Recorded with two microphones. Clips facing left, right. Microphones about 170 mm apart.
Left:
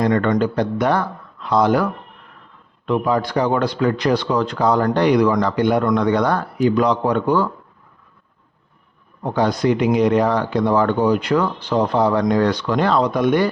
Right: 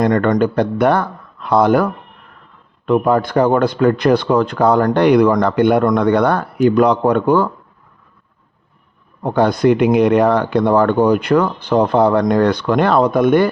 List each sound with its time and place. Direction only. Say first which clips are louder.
0.0 s speech: right 3 dB; 50° right (ahead or behind)
9.2 s speech: right 4 dB; 55° right (ahead or behind)